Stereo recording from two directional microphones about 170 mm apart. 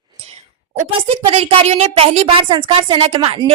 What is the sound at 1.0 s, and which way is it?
A woman's voice, 35° right (ahead or behind).